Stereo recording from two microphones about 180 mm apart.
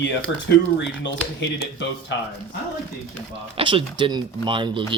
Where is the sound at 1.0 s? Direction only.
80° left.